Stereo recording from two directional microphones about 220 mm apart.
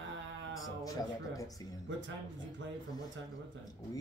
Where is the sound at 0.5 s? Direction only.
15° left (ahead or behind).